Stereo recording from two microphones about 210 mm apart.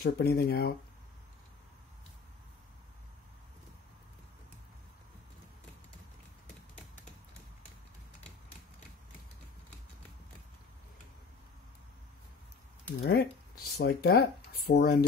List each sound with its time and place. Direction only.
0.0 s speech: 50° left (ahead or behind)
13.0 s speech: 50° left (ahead or behind)